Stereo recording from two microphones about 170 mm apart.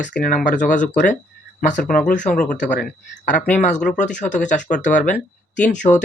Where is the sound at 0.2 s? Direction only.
50° left (ahead or behind).